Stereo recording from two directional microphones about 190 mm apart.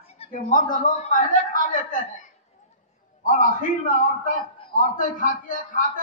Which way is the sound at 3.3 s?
45° left (ahead or behind).